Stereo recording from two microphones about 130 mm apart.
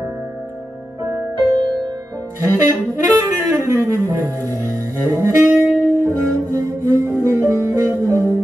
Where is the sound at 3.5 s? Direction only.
20° right (ahead or behind).